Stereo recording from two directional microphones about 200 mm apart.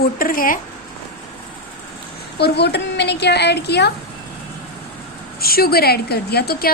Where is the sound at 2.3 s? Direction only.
55° left (ahead or behind).